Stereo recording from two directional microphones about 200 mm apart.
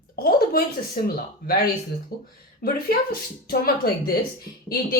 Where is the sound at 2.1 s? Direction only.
50° left (ahead or behind).